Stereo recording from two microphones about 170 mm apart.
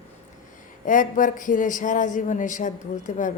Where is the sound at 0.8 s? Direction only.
50° left (ahead or behind).